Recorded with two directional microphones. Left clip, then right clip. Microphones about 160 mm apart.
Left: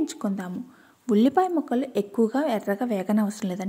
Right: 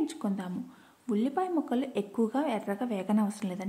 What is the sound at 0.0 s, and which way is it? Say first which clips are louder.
Speech: left 4 dB; 30° left (ahead or behind).